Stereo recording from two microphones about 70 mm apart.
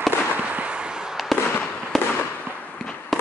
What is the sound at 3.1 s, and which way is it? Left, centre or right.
Fireworks, centre.